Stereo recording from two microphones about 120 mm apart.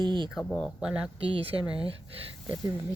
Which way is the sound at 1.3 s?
50° right (ahead or behind).